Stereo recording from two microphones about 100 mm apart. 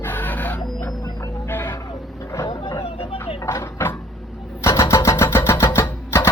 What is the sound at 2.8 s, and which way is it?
Vehicle, 65° left (ahead or behind).